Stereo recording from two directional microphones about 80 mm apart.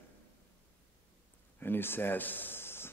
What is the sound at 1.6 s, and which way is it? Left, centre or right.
Speech, left.